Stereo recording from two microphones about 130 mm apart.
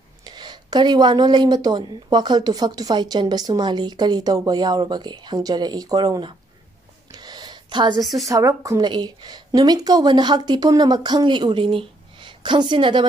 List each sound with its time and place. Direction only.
0.2 s speech: 35° right (ahead or behind)
7.1 s a sound: 35° right (ahead or behind)
8.0 s a woman's voice: centre (ahead or behind)
8.3 s speech: 25° right (ahead or behind)